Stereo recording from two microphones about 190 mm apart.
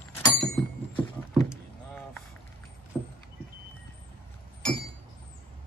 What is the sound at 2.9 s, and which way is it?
Vehicle, 5° right (ahead or behind).